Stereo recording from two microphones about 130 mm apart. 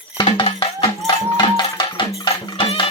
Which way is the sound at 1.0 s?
35° left (ahead or behind).